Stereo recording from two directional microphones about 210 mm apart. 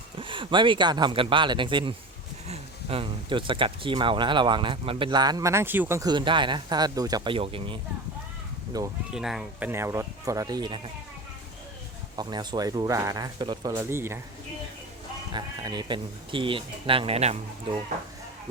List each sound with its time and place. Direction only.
0.2 s speech: 25° right (ahead or behind)
9.1 s speech: centre (ahead or behind); by 10.8 s 20° right (ahead or behind)
12.1 s speech: 20° right (ahead or behind)
15.3 s speech: 20° right (ahead or behind)